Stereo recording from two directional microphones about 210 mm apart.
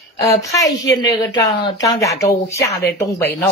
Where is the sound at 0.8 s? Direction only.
20° left (ahead or behind).